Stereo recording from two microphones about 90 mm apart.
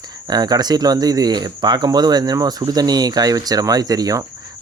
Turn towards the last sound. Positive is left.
turn(degrees=-45)  # may be behind; listen again after turning